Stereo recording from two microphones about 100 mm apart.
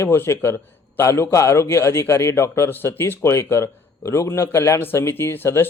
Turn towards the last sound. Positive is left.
turn(degrees=20)  # may be behind; listen again after turning